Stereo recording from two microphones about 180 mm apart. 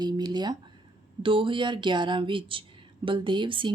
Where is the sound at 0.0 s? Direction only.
25° right (ahead or behind).